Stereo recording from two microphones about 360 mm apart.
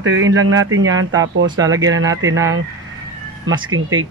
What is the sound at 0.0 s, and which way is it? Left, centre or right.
Speech, right.